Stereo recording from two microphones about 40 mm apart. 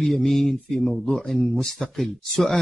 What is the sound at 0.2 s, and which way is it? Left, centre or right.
Speech, centre.